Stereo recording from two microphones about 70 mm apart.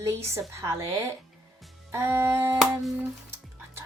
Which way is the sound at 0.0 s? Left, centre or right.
Right.